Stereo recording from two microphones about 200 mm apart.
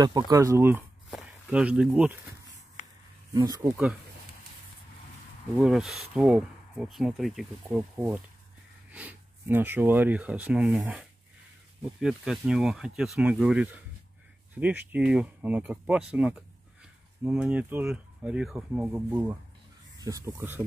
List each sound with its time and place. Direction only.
0.0 s speech: 20° right (ahead or behind)
3.3 s speech: 20° right (ahead or behind)
5.6 s speech: centre (ahead or behind)
8.9 s speech: 10° right (ahead or behind)